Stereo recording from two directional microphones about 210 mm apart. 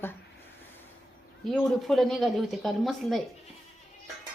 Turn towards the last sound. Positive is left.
turn(degrees=0)  # may be behind; listen again after turning